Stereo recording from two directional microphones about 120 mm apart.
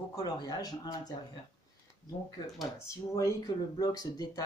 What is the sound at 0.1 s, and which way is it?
Speech, 35° left (ahead or behind).